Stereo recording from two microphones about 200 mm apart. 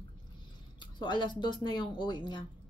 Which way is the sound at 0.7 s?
25° left (ahead or behind).